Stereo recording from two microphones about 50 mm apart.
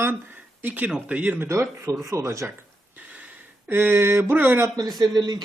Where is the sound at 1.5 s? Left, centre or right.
Right.